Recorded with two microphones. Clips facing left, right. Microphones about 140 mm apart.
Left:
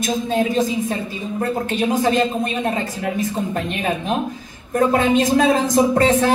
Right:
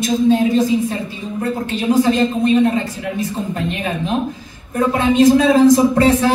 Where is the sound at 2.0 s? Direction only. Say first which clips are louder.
Right 3 dB; 45° left (ahead or behind).